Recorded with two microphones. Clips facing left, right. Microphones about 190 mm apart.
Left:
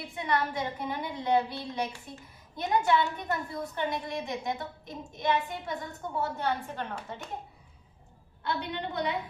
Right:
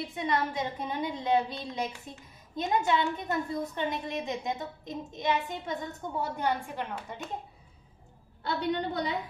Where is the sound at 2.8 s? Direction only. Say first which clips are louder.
Left 1 dB; 20° right (ahead or behind).